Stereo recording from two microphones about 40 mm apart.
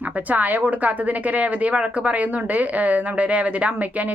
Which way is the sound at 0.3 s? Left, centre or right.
Right.